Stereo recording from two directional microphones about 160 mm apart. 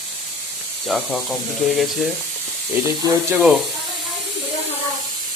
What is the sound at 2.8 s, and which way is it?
Speech, 20° right (ahead or behind).